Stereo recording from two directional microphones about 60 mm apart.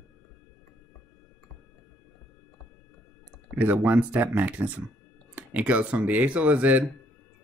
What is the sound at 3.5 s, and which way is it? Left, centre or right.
Speech, right.